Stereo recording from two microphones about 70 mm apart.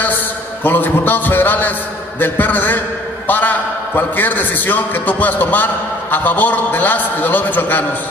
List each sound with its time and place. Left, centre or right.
0.7 s a man's voice: left